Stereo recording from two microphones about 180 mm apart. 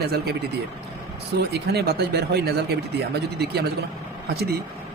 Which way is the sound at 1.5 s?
65° right (ahead or behind).